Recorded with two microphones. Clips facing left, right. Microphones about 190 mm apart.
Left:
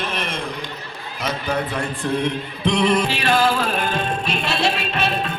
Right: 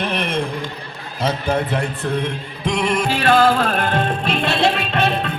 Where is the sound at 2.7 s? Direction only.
45° right (ahead or behind).